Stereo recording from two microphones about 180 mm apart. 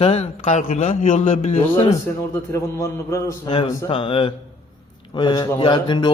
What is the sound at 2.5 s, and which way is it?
A man's voice, 15° left (ahead or behind).